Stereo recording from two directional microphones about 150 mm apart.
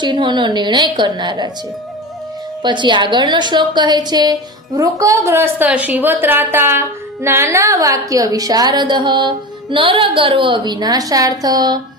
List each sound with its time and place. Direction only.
0.0 s a woman's voice: 30° right (ahead or behind)
2.6 s a woman's voice: 30° right (ahead or behind)